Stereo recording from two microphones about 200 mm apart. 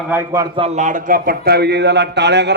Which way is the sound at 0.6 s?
35° right (ahead or behind).